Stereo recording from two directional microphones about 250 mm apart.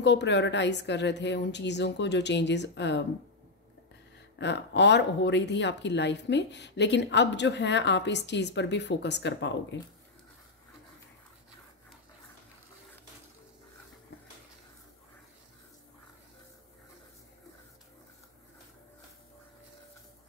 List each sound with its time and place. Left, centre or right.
0.0 s speech: left
4.4 s speech: left